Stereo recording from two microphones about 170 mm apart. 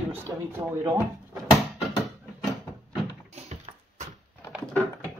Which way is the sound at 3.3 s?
40° right (ahead or behind).